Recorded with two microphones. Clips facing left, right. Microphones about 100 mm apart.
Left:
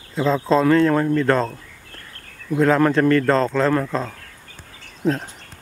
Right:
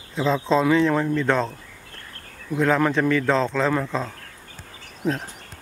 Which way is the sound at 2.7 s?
Centre (ahead or behind).